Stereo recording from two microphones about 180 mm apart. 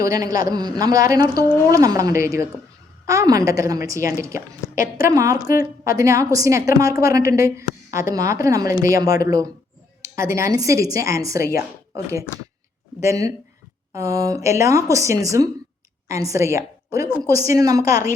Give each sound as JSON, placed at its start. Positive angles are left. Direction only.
{"t": 0.0, "sound": "a woman's voice", "side_deg": -20}
{"t": 13.0, "sound": "a woman's voice", "side_deg": -15}